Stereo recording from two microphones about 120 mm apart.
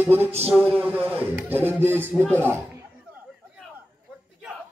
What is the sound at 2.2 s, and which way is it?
Speech, 15° left (ahead or behind).